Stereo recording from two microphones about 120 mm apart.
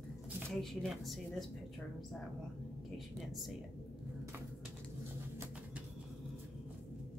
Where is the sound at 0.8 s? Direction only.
Centre (ahead or behind).